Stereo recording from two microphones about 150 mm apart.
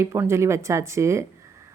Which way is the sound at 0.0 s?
20° right (ahead or behind).